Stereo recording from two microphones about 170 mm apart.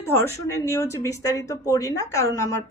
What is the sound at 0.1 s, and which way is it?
A woman's voice, 15° left (ahead or behind).